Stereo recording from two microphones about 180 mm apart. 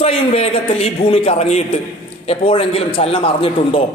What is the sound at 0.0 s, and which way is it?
A man's voice, 35° left (ahead or behind).